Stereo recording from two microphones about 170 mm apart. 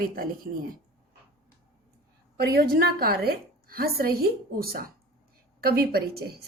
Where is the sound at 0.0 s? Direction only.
55° right (ahead or behind).